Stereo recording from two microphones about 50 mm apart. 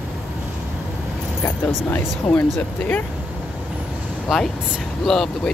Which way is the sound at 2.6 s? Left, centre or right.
Left.